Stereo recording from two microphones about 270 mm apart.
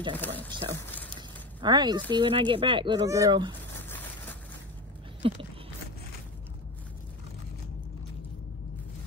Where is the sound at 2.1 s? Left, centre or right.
Centre.